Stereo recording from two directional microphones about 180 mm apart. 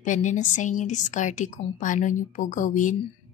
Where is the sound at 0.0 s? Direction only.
45° left (ahead or behind).